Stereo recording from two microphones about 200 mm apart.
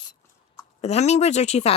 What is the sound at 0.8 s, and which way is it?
Speech, 35° left (ahead or behind).